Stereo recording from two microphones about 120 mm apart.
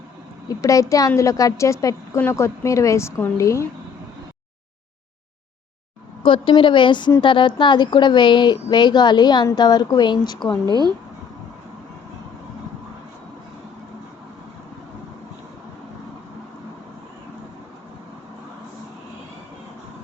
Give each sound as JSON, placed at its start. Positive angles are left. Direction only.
{"t": 0.6, "sound": "a woman's voice", "side_deg": 30}
{"t": 6.2, "sound": "a woman's voice", "side_deg": 45}
{"t": 10.7, "sound": "speech", "side_deg": -35}